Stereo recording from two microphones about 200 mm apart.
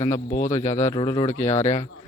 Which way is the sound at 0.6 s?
35° left (ahead or behind).